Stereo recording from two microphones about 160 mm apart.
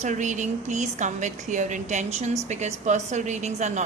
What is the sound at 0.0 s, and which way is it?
A woman's voice, 50° right (ahead or behind).